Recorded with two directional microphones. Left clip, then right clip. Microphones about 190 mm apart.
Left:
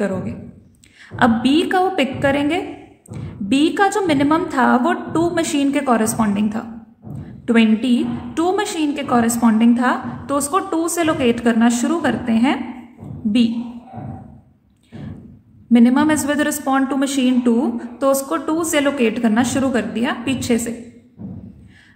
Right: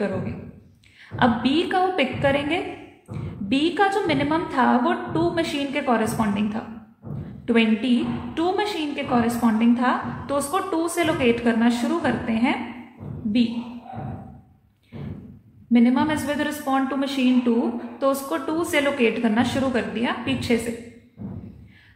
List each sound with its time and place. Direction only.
1.1 s a woman's voice: 30° left (ahead or behind)
15.7 s a woman's voice: 30° left (ahead or behind)